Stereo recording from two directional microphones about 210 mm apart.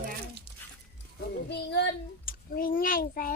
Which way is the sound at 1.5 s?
55° left (ahead or behind).